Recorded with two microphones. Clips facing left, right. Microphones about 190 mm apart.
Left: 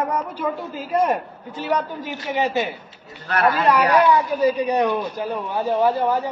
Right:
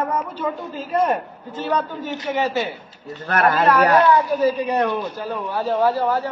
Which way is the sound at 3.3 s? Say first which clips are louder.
Right 1 dB; 50° right (ahead or behind).